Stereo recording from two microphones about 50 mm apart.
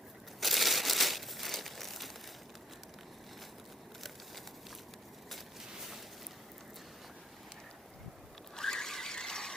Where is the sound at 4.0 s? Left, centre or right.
Centre.